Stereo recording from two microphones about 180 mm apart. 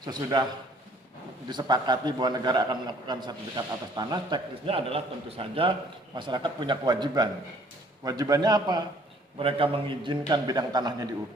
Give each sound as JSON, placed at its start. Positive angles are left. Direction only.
{"t": 0.0, "sound": "a man's voice", "side_deg": -20}
{"t": 1.5, "sound": "a man's voice", "side_deg": -25}